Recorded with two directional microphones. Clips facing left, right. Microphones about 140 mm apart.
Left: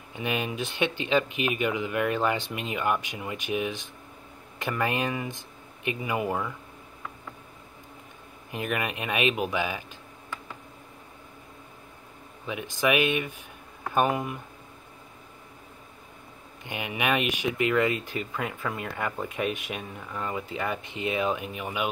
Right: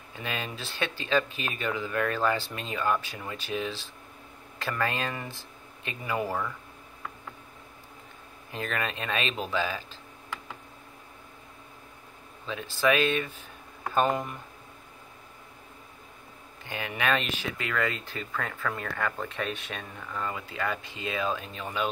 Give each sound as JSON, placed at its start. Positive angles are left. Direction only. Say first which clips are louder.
{"t": 0.1, "sound": "speech", "louder": "left 5 dB", "side_deg": 20}
{"t": 8.5, "sound": "speech", "louder": "left 2 dB", "side_deg": 15}
{"t": 12.4, "sound": "speech", "louder": "even", "side_deg": 15}
{"t": 16.6, "sound": "speech", "louder": "left 1 dB", "side_deg": 15}